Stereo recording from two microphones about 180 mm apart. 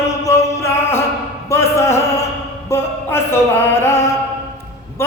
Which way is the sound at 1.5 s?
15° left (ahead or behind).